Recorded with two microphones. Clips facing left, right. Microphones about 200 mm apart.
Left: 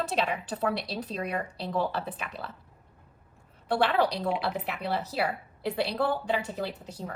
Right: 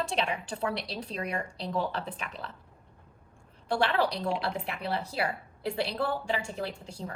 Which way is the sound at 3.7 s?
5° left (ahead or behind).